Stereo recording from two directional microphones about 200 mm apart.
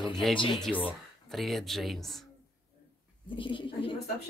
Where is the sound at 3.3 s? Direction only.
25° left (ahead or behind).